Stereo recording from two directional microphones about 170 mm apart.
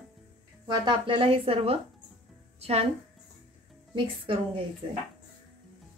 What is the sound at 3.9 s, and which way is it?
Speech, 30° right (ahead or behind).